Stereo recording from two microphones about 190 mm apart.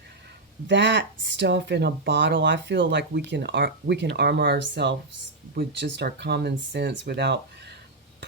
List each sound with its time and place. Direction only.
0.7 s speech: 65° right (ahead or behind)